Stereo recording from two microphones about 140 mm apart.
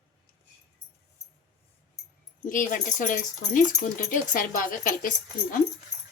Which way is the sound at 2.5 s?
70° left (ahead or behind).